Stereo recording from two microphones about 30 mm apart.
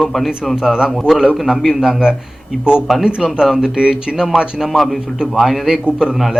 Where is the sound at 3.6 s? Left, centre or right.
Right.